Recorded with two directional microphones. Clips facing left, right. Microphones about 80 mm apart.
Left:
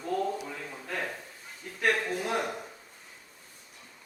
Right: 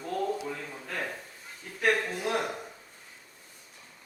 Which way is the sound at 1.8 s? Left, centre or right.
Centre.